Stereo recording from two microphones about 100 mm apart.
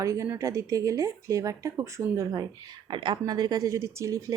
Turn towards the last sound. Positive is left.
turn(degrees=-30)  # may be behind; listen again after turning